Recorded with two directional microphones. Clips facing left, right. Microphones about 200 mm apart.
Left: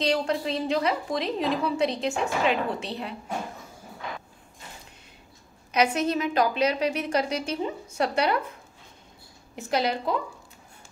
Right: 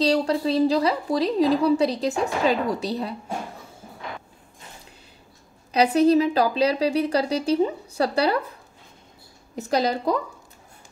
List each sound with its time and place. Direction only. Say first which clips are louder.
0.0 s a woman's voice: right 4 dB; 35° right (ahead or behind)
5.7 s a woman's voice: right 7 dB; 35° right (ahead or behind)
9.6 s a woman's voice: right 3 dB; 40° right (ahead or behind)